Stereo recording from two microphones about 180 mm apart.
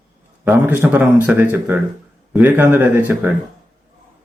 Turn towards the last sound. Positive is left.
turn(degrees=-10)  # may be behind; listen again after turning